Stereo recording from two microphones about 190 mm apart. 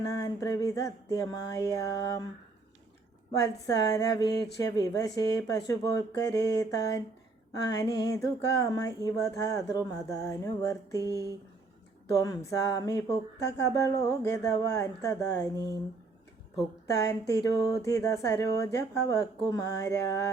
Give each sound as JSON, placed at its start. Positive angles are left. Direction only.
{"t": 0.1, "sound": "speech", "side_deg": 15}
{"t": 3.9, "sound": "speech", "side_deg": 20}
{"t": 11.0, "sound": "speech", "side_deg": -15}
{"t": 12.1, "sound": "speech", "side_deg": 20}
{"t": 16.8, "sound": "speech", "side_deg": 15}